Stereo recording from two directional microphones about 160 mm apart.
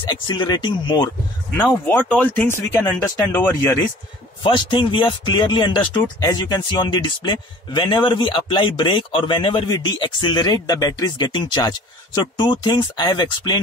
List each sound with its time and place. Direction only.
0.0 s speech: 30° left (ahead or behind)
1.9 s speech: 10° left (ahead or behind)
4.4 s speech: 30° left (ahead or behind)